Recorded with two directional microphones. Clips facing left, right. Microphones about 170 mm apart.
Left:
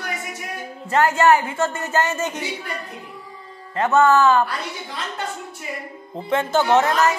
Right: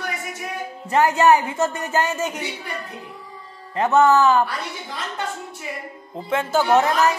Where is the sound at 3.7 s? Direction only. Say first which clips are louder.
Even; 15° right (ahead or behind).